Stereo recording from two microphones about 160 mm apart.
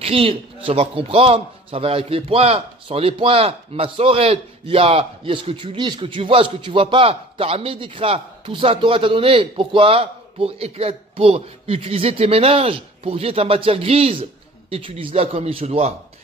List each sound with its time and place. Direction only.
0.0 s a man's voice: 35° right (ahead or behind)